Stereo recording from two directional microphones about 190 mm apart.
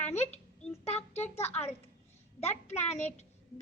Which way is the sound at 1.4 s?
35° left (ahead or behind).